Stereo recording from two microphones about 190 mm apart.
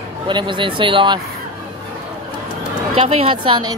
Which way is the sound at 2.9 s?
30° right (ahead or behind).